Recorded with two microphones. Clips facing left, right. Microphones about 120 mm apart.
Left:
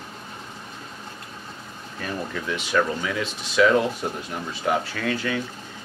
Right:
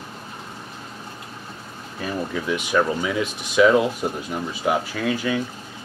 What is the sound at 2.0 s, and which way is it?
Speech, 15° right (ahead or behind).